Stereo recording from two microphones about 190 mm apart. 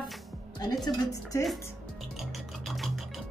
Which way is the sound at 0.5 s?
20° left (ahead or behind).